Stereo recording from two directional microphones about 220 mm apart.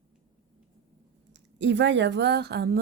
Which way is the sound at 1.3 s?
55° right (ahead or behind).